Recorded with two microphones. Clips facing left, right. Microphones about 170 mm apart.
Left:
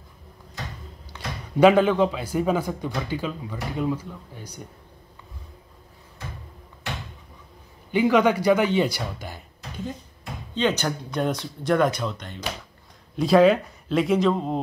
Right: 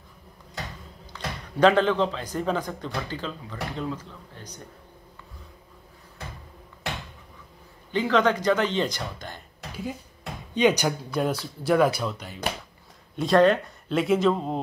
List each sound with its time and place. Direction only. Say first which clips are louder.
1.1 s a man's voice: left 4 dB; 10° left (ahead or behind)
7.9 s a man's voice: left 3 dB; 10° left (ahead or behind)
10.5 s speech: right 2 dB; 15° right (ahead or behind)